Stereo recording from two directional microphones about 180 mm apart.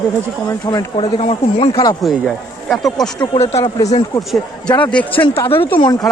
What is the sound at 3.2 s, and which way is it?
Speech, 35° left (ahead or behind).